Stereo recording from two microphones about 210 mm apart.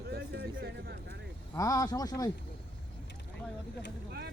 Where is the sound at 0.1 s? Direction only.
50° right (ahead or behind).